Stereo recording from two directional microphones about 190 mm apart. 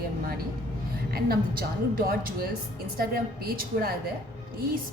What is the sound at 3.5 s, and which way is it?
Speech, 50° right (ahead or behind).